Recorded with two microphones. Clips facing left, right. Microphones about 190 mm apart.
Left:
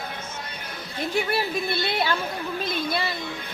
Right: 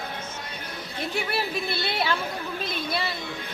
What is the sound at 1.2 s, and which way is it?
Speech, centre (ahead or behind).